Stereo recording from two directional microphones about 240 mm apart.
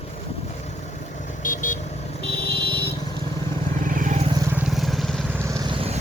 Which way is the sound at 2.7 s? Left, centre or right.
Centre.